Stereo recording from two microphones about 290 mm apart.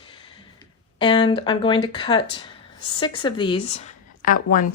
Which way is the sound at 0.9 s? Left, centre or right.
Centre.